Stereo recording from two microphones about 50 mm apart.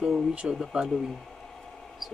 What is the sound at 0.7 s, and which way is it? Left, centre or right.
Speech, centre.